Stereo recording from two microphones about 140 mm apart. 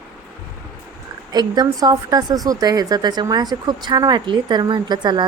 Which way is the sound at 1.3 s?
30° right (ahead or behind).